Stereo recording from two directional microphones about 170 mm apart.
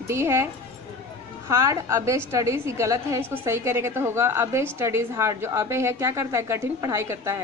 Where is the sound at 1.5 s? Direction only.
20° right (ahead or behind).